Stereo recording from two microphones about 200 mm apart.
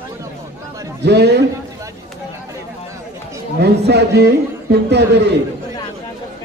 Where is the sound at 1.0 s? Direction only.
55° right (ahead or behind).